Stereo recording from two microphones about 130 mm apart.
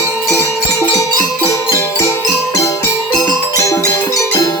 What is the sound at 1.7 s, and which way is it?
Music, 20° left (ahead or behind).